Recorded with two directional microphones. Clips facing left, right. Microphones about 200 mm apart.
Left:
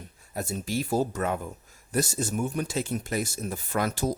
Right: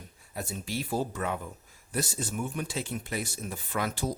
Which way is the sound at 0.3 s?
45° left (ahead or behind).